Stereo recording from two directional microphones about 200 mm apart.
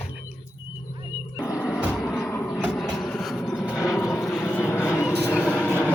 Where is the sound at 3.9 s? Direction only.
15° left (ahead or behind).